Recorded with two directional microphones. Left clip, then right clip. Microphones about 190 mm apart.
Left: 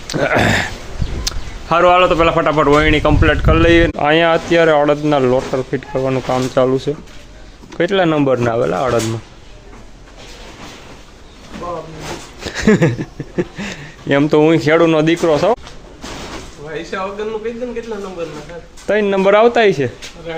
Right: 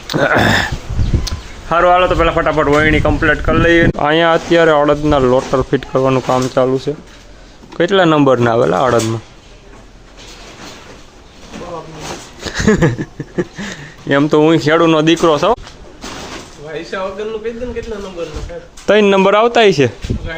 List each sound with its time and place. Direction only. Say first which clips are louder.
0.1 s speech: right 2 dB; 15° right (ahead or behind)
1.3 s a sound: left 3 dB; 55° left (ahead or behind)
1.7 s a man's voice: even; 5° left (ahead or behind)
3.9 s speech: right 1 dB; 10° right (ahead or behind)
6.6 s speech: left 3 dB; centre (ahead or behind)
7.8 s speech: right 3 dB; 10° right (ahead or behind)
12.5 s speech: even; 5° right (ahead or behind)
16.6 s speech: right 1 dB; 5° left (ahead or behind)
18.9 s speech: right 3 dB; 25° right (ahead or behind)